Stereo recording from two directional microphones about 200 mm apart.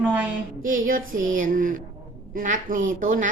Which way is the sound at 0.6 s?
45° right (ahead or behind).